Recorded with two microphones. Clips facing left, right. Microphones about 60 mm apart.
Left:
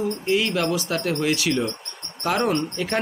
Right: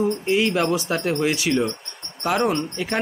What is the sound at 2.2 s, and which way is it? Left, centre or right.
Speech, centre.